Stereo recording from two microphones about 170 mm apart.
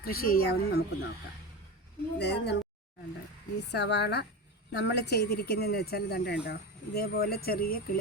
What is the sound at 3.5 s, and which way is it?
A woman's voice, 80° left.